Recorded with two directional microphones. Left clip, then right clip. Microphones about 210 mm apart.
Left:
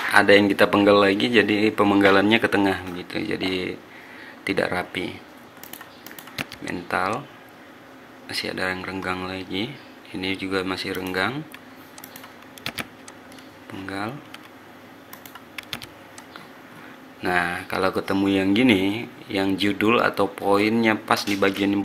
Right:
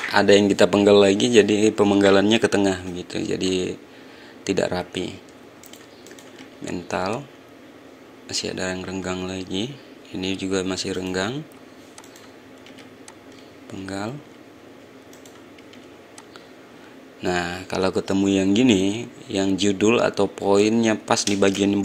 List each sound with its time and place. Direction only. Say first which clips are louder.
0.1 s speech: even; 30° right (ahead or behind)
6.7 s speech: left 1 dB; 30° right (ahead or behind)
8.3 s speech: left 1 dB; 30° right (ahead or behind)
13.8 s speech: even; 35° right (ahead or behind)
17.2 s speech: left 2 dB; 35° right (ahead or behind)